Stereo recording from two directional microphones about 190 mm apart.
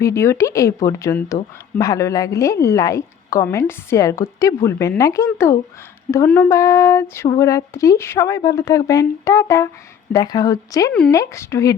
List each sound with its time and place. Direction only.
0.0 s a woman's voice: 15° left (ahead or behind)